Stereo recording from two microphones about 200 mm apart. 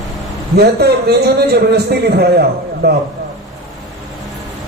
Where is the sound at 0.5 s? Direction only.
55° right (ahead or behind).